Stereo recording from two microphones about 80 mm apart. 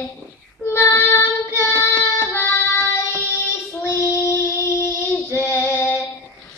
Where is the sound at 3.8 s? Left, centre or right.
Left.